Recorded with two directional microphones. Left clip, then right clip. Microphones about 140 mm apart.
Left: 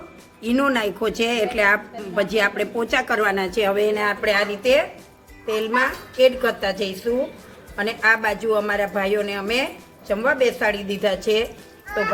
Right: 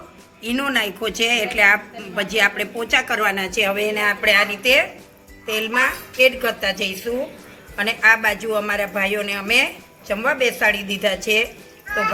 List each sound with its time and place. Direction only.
0.4 s a woman's voice: 90° left; by 11.4 s 50° left (ahead or behind)